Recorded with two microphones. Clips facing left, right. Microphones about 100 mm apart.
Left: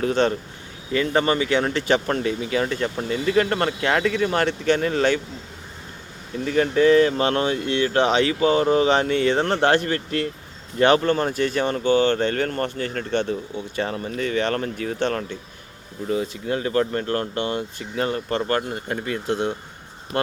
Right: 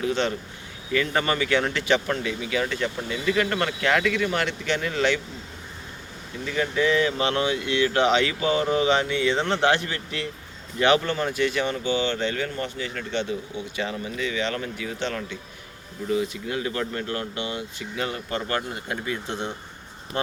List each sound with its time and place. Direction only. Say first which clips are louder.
0.0 s speech: left 5 dB; 40° left (ahead or behind)
0.9 s speech: left 4 dB; 30° left (ahead or behind)
6.4 s speech: left 6 dB; 40° left (ahead or behind)